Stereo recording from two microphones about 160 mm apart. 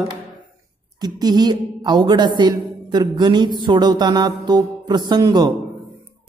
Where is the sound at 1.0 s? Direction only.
25° right (ahead or behind).